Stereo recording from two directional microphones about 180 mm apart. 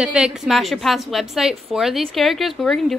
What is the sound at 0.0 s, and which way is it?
A woman's voice, 5° right (ahead or behind).